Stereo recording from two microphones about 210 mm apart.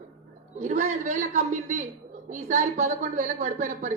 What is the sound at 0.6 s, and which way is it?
A woman's voice, 35° right (ahead or behind).